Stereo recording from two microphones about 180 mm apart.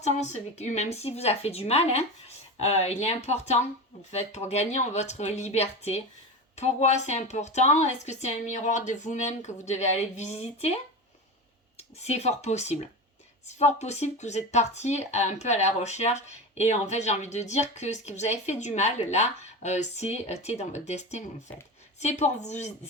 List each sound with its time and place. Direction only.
0.0 s speech: 40° left (ahead or behind)
11.8 s speech: 35° left (ahead or behind)